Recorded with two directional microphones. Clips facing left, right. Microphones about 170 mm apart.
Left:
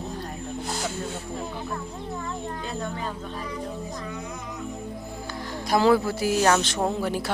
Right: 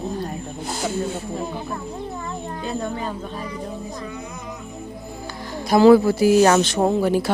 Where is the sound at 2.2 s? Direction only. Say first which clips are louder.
Right 3 dB; 15° right (ahead or behind).